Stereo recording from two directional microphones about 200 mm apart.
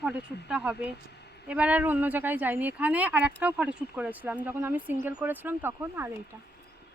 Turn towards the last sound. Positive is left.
turn(degrees=-10)  # may be behind; listen again after turning